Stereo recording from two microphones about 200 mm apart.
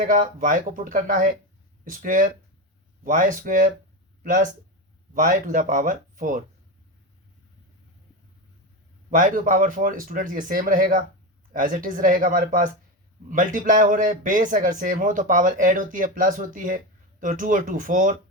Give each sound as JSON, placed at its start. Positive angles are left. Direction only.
{"t": 0.0, "sound": "speech", "side_deg": -40}
{"t": 9.0, "sound": "speech", "side_deg": -40}